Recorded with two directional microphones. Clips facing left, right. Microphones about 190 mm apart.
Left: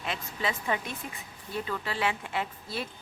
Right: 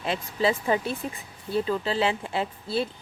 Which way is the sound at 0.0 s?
30° right (ahead or behind).